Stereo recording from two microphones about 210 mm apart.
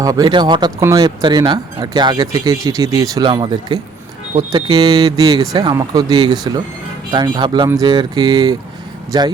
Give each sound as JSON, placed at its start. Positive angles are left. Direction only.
{"t": 0.0, "sound": "speech", "side_deg": -15}